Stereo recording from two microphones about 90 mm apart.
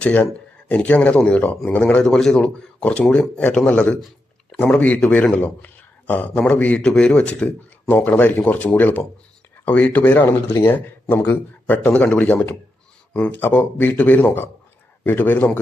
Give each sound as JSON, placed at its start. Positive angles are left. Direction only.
{"t": 0.0, "sound": "speech", "side_deg": 15}